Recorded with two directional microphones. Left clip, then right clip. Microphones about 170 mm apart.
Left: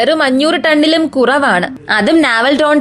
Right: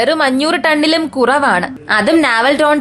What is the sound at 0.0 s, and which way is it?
A woman's voice, 15° left (ahead or behind).